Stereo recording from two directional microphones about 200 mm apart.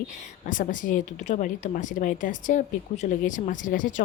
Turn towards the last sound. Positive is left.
turn(degrees=40)  # may be behind; listen again after turning